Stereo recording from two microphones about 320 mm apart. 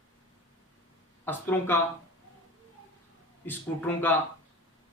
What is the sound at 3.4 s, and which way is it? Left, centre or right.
Speech, centre.